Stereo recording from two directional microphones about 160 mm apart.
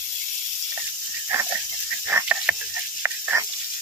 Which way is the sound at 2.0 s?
10° right (ahead or behind).